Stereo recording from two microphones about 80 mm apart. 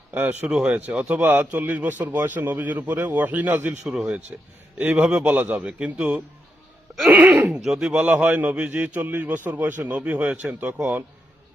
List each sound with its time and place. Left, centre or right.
0.1 s a man's voice: right
7.5 s a man's voice: centre